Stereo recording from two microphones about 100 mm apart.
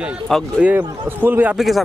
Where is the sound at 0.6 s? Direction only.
20° right (ahead or behind).